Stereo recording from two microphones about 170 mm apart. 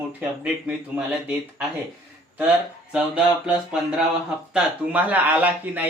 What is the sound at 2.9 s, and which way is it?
Speech, 5° right (ahead or behind).